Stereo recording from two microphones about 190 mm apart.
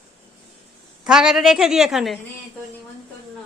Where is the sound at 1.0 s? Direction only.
5° right (ahead or behind).